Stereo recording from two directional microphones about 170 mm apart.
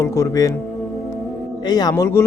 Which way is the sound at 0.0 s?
15° left (ahead or behind).